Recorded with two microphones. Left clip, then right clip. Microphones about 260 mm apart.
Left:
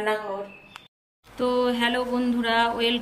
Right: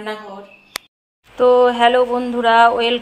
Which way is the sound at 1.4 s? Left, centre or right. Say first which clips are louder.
Right 12 dB; centre.